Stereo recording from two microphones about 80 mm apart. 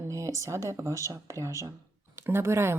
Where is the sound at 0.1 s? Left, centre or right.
Right.